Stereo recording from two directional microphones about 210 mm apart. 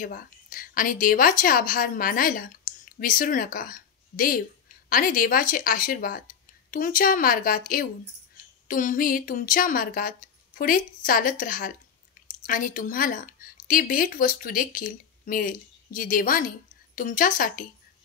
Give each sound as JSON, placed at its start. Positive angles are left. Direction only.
{"t": 0.0, "sound": "a woman's voice", "side_deg": 40}